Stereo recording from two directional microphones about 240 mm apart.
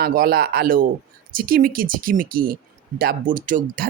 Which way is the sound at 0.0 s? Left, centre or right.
Right.